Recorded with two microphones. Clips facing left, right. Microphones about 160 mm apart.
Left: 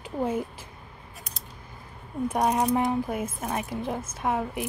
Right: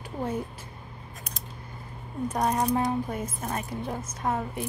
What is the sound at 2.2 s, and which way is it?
Speech, 10° left (ahead or behind).